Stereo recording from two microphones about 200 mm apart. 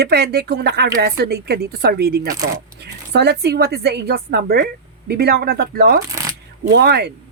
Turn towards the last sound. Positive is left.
turn(degrees=-55)  # may be behind; listen again after turning